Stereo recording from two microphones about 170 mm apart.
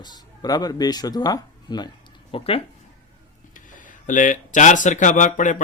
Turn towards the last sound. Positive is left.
turn(degrees=50)  # may be behind; listen again after turning